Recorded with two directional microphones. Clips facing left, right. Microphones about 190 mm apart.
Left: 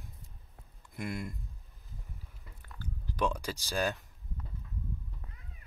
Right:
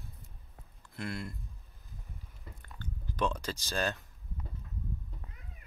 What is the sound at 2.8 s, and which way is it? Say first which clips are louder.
Speech: left 1 dB; 10° left (ahead or behind).